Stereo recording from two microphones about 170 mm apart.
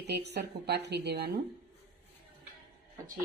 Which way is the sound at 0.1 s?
75° right (ahead or behind).